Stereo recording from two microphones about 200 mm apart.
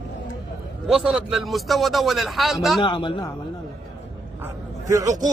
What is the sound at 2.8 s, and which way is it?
Speech, 25° left (ahead or behind).